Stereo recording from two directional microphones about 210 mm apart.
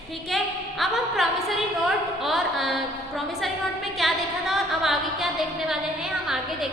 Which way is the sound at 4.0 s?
Centre (ahead or behind).